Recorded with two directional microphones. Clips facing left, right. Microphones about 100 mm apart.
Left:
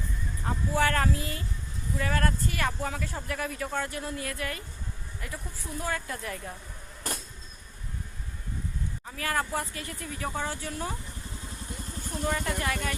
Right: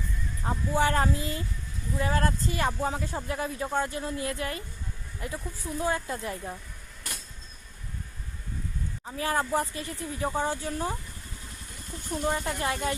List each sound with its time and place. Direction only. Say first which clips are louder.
0.4 s speech: right 1 dB; 20° right (ahead or behind)
7.1 s vehicle: left 6 dB; 35° left (ahead or behind)
9.0 s speech: right 3 dB; 25° right (ahead or behind)
12.5 s speech: right 2 dB; 25° right (ahead or behind)